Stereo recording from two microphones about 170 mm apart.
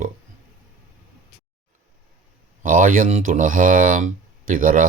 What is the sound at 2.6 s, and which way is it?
Speech, 55° right (ahead or behind).